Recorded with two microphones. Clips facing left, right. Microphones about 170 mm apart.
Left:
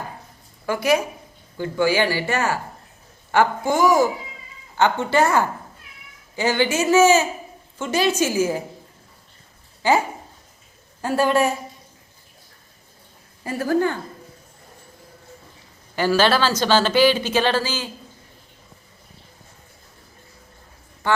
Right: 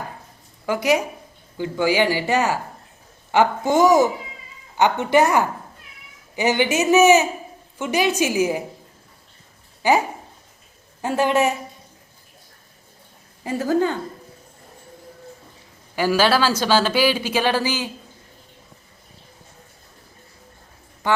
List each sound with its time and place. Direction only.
0.6 s speech: 15° right (ahead or behind)
9.8 s speech: 15° right (ahead or behind)
11.0 s speech: 20° right (ahead or behind)
13.4 s speech: 20° right (ahead or behind)
16.0 s speech: 10° right (ahead or behind)